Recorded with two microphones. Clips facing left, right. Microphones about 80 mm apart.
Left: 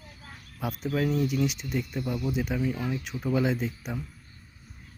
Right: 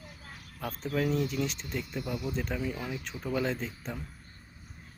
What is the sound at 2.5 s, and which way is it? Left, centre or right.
Speech, centre.